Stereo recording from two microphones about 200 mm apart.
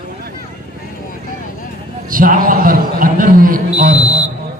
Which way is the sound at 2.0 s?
45° right (ahead or behind).